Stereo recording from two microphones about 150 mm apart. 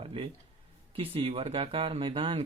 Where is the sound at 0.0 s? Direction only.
40° right (ahead or behind).